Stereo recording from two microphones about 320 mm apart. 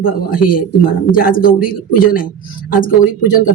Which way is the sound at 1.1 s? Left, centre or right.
Left.